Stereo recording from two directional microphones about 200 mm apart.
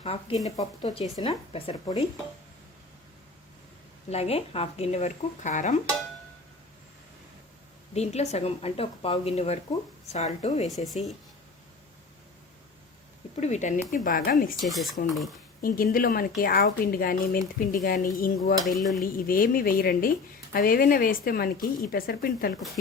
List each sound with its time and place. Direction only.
0.0 s speech: 30° left (ahead or behind)
4.1 s speech: 30° left (ahead or behind)
7.9 s speech: 35° left (ahead or behind)
10.8 s speech: centre (ahead or behind)
13.3 s speech: 35° left (ahead or behind)
14.6 s speech: centre (ahead or behind)
15.6 s speech: 45° left (ahead or behind)
18.6 s speech: centre (ahead or behind)
19.1 s speech: 45° left (ahead or behind)